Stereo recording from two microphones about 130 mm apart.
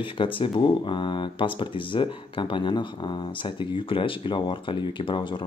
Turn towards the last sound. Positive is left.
turn(degrees=40)  # may be behind; listen again after turning